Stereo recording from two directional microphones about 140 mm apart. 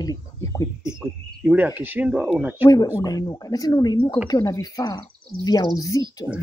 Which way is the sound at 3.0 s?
25° left (ahead or behind).